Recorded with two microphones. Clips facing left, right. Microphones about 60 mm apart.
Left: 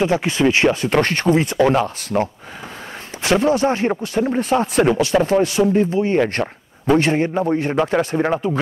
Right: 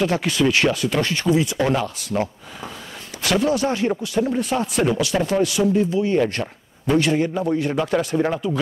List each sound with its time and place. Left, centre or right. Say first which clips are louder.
0.0 s speech: left 3 dB; left
0.8 s speech: left 4 dB; left
3.2 s speech: left 3 dB; left